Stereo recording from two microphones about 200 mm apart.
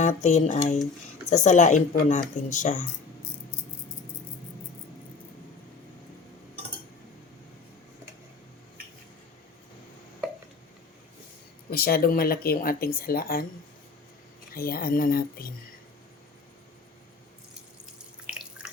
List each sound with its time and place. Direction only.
0.0 s speech: 35° left (ahead or behind)
11.7 s speech: 50° left (ahead or behind)
14.5 s speech: 45° left (ahead or behind)
18.3 s drip: 5° right (ahead or behind)